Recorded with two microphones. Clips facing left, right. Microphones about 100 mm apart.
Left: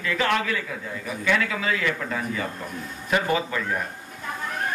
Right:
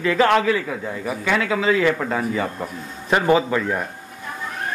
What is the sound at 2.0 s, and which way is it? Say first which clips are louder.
Speech: right 6 dB; 40° right (ahead or behind).